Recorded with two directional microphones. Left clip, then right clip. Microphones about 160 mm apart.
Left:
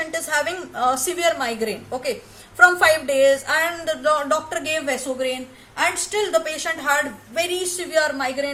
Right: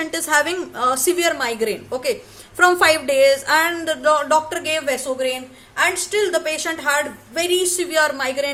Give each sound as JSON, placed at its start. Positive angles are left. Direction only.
{"t": 0.1, "sound": "a woman's voice", "side_deg": -50}